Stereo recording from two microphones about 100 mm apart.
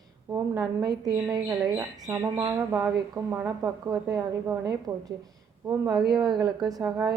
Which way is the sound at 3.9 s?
35° right (ahead or behind).